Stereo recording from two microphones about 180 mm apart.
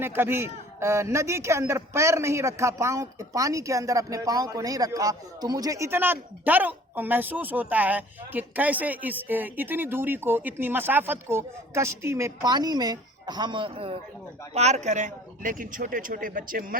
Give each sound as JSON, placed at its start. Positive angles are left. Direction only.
{"t": 0.0, "sound": "a man's voice", "side_deg": -10}